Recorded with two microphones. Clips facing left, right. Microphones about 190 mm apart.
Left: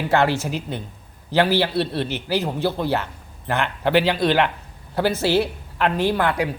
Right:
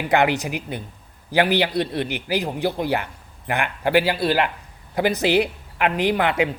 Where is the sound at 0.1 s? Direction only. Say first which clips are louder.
Right 1 dB; 15° right (ahead or behind).